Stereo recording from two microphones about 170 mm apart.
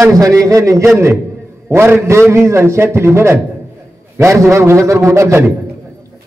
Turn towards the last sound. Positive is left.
turn(degrees=-15)  # may be behind; listen again after turning